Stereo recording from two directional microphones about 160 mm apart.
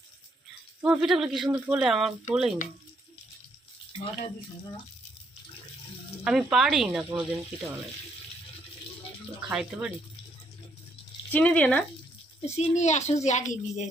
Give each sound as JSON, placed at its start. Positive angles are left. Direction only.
{"t": 0.8, "sound": "speech", "side_deg": -5}
{"t": 6.2, "sound": "speech", "side_deg": -5}
{"t": 9.5, "sound": "speech", "side_deg": -5}
{"t": 11.3, "sound": "speech", "side_deg": 10}
{"t": 12.5, "sound": "a child's voice", "side_deg": 45}